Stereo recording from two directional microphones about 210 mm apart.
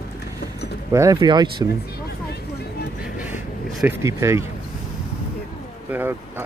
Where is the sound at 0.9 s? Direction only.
15° right (ahead or behind).